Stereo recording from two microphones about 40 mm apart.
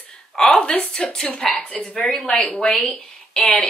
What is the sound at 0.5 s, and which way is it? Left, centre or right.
Speech, left.